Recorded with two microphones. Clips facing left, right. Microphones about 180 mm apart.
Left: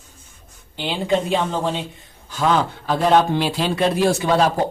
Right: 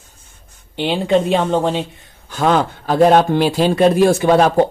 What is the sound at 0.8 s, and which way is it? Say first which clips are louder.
Speech: right 5 dB; 65° right (ahead or behind).